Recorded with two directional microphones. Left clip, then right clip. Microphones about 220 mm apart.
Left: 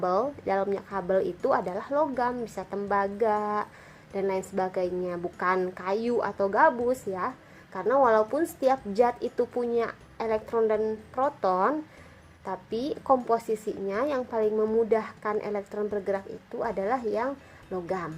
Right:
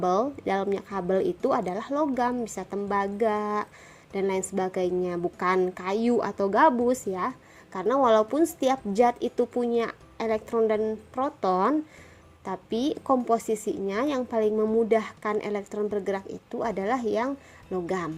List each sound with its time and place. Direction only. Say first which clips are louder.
0.0 s a woman's voice: right 1 dB; 35° right (ahead or behind)
12.7 s a woman's voice: right 4 dB; 60° right (ahead or behind)
13.1 s a woman's voice: left 1 dB; 30° right (ahead or behind)